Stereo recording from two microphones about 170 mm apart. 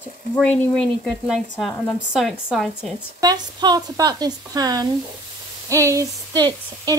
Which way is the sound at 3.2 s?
25° right (ahead or behind).